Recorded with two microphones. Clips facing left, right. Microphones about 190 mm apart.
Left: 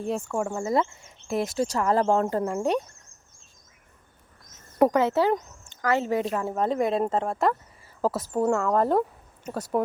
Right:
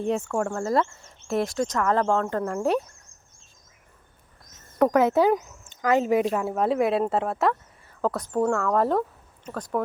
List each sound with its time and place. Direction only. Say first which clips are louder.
0.3 s speech: right 1 dB; 5° left (ahead or behind)
0.6 s speech: even; 20° left (ahead or behind)
1.3 s speech: right 2 dB; centre (ahead or behind)
1.5 s speech: even; 30° left (ahead or behind)
2.0 s speech: left 1 dB; 10° left (ahead or behind)
4.9 s speech: right 3 dB; 10° right (ahead or behind)
6.5 s speech: even; 5° right (ahead or behind)